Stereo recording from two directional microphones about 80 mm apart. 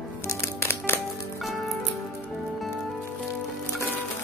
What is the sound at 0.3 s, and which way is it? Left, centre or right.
Music, left.